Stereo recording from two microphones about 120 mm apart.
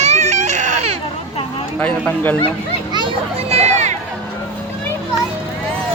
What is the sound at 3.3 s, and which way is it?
Run, 60° right (ahead or behind).